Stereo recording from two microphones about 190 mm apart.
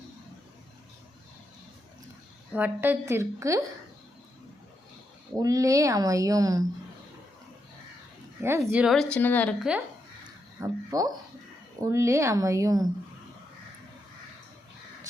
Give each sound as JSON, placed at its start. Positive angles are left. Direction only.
{"t": 2.5, "sound": "speech", "side_deg": -10}
{"t": 5.4, "sound": "speech", "side_deg": -20}
{"t": 8.4, "sound": "speech", "side_deg": -15}
{"t": 10.6, "sound": "speech", "side_deg": -20}